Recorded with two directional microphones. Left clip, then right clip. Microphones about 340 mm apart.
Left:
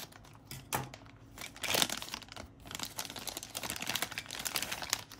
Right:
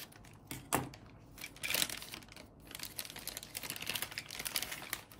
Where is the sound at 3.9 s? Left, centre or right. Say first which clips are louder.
Left 3 dB; centre.